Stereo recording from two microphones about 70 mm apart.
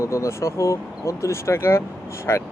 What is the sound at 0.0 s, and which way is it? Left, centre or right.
Speech, left.